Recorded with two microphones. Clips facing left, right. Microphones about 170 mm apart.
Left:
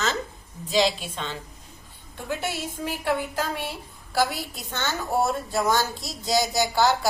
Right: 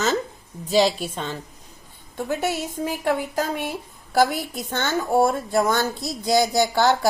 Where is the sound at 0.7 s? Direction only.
40° right (ahead or behind); by 7.1 s 60° right (ahead or behind).